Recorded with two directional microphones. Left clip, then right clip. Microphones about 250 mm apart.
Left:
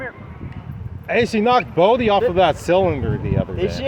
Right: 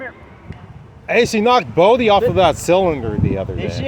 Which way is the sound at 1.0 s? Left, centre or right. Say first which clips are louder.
Right 3 dB; right.